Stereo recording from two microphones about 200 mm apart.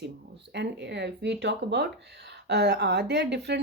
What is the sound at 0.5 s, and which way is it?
Speech, 60° right (ahead or behind).